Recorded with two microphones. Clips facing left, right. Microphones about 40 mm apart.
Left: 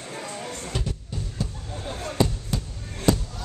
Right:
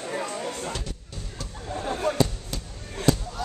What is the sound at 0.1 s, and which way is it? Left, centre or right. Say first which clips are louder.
Music: right 5 dB; right.